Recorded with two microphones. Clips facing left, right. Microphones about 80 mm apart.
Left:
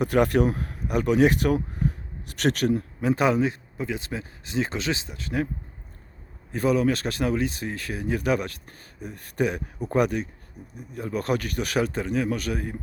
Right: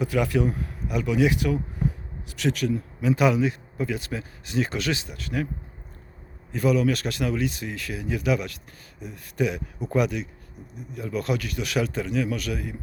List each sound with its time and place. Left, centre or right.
0.0 s speech: left
2.2 s speech: left
3.0 s speech: left
6.5 s speech: left